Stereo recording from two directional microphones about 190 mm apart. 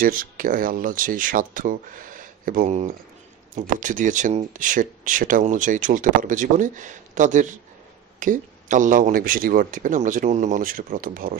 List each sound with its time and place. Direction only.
0.0 s speech: 45° right (ahead or behind)